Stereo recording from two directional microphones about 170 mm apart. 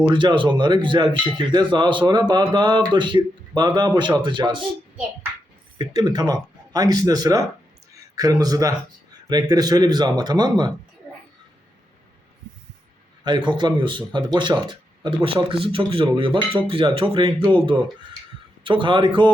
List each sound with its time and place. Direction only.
0.1 s speech: 30° right (ahead or behind)
6.0 s a man's voice: 25° right (ahead or behind)
13.2 s speech: 25° right (ahead or behind)